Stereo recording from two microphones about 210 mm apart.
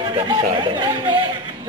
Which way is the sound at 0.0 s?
20° right (ahead or behind).